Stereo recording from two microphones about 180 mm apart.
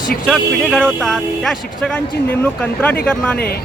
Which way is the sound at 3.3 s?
60° left (ahead or behind).